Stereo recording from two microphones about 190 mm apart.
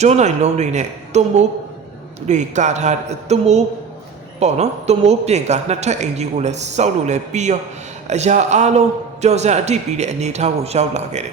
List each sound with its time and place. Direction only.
0.0 s a man's voice: 35° right (ahead or behind)